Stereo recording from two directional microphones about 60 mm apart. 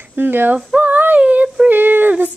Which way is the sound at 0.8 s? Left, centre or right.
Right.